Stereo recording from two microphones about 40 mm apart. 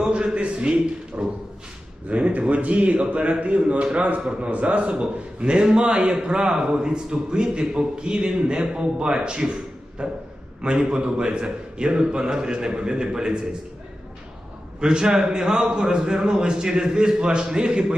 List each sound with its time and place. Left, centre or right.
0.1 s a man's voice: right
14.8 s a man's voice: centre